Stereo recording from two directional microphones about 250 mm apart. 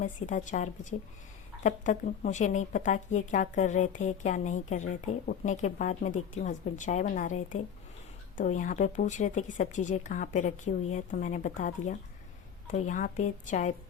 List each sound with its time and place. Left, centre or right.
0.0 s a woman's voice: left